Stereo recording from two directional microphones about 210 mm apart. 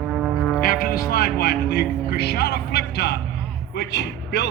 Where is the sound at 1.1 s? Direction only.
45° left (ahead or behind).